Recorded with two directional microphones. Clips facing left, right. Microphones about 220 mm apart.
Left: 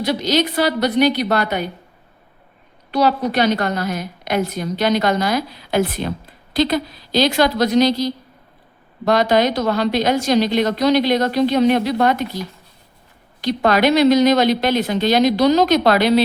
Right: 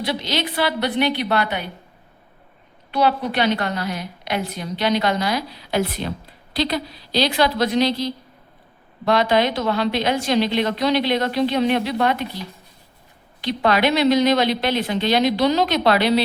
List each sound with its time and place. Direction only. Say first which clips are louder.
0.0 s a woman's voice: left 6 dB; 45° left (ahead or behind)
2.9 s a woman's voice: left 3 dB; 40° left (ahead or behind)